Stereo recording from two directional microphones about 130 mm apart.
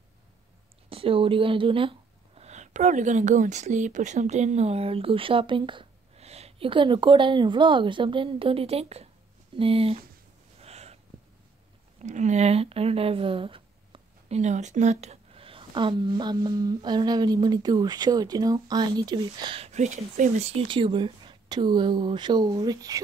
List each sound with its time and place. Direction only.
0.8 s speech: 45° right (ahead or behind)
6.1 s speech: 55° right (ahead or behind)
10.6 s a sound: 55° right (ahead or behind)
12.0 s speech: 65° right (ahead or behind); by 14.4 s 45° right (ahead or behind)
14.4 s speech: 65° right (ahead or behind); by 19.5 s 30° right (ahead or behind)
19.5 s speech: 60° right (ahead or behind)
20.6 s speech: 40° right (ahead or behind)